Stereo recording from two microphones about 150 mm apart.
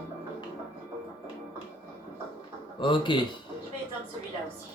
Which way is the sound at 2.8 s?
35° left (ahead or behind).